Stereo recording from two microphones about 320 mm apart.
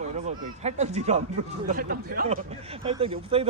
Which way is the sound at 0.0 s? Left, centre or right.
Right.